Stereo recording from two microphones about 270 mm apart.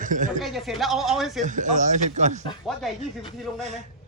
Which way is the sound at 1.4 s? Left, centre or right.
Right.